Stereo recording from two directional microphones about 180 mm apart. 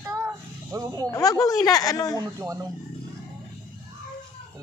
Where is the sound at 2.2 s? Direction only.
15° right (ahead or behind).